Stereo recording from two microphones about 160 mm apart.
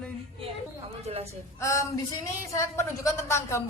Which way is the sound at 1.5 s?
20° left (ahead or behind).